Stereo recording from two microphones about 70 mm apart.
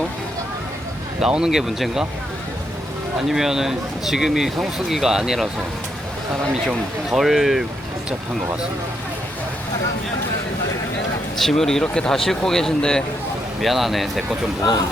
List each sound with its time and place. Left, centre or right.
1.2 s speech: centre
3.2 s speech: centre
6.7 s speech: centre
11.3 s speech: centre